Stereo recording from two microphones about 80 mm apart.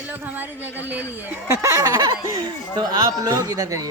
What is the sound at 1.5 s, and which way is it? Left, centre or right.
Speech, right.